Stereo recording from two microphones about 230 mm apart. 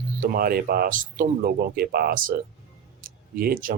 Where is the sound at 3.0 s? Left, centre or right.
Right.